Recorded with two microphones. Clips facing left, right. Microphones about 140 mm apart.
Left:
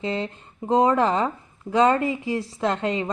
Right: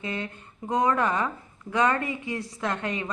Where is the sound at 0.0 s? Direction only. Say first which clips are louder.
Left 6 dB; 25° left (ahead or behind).